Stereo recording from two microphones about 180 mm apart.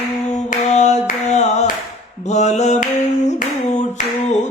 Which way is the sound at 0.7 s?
40° left (ahead or behind).